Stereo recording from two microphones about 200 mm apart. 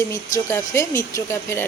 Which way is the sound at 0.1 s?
15° left (ahead or behind).